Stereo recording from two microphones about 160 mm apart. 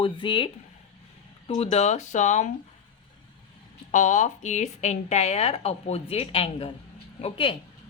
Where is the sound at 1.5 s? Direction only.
45° left (ahead or behind).